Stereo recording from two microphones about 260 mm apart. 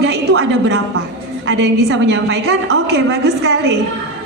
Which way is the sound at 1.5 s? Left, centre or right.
Right.